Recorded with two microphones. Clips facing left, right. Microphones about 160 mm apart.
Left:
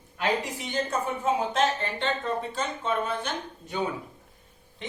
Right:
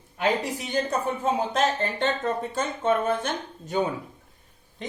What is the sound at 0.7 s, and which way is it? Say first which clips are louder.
Speech: right 2 dB; 40° right (ahead or behind).